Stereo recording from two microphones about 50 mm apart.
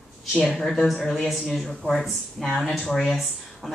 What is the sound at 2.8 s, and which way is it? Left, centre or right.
Speech, centre.